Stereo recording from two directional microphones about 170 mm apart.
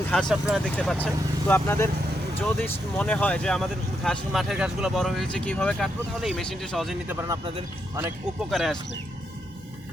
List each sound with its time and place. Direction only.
0.1 s speech: 5° left (ahead or behind)
0.8 s speech: 10° left (ahead or behind)
7.1 s speech: 15° right (ahead or behind)
8.4 s speech: centre (ahead or behind)